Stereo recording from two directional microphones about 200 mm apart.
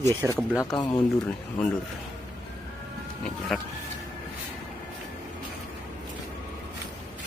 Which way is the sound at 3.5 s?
Centre (ahead or behind).